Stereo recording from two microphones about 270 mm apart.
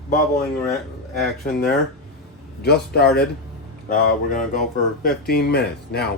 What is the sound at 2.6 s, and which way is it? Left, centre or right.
Speech, left.